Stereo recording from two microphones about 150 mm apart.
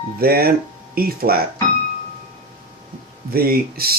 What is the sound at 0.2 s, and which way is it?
Speech, 90° right.